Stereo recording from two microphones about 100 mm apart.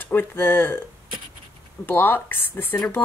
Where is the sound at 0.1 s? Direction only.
20° left (ahead or behind).